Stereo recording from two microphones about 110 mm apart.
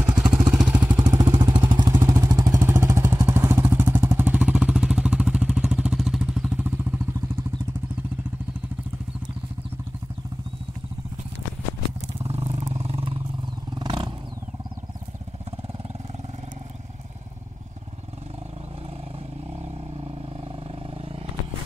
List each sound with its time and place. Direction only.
0.1 s vehicle: 5° right (ahead or behind)
0.9 s vehicle: 40° right (ahead or behind)
2.0 s vehicle: 35° right (ahead or behind); by 6.6 s 5° right (ahead or behind)
6.6 s vehicle: 20° right (ahead or behind)
12.2 s vehicle: 65° right (ahead or behind)
13.7 s a sound: 45° right (ahead or behind)
20.0 s vehicle: 55° right (ahead or behind)